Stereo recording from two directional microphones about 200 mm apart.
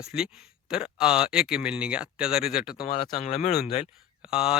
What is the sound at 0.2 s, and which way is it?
Speech, 5° right (ahead or behind).